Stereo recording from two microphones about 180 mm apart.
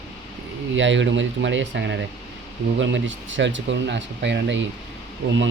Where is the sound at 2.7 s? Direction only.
90° right.